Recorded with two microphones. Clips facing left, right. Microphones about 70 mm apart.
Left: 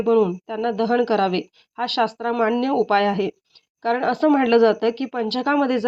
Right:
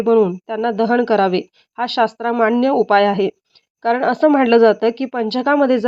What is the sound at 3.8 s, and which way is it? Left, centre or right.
A woman's voice, right.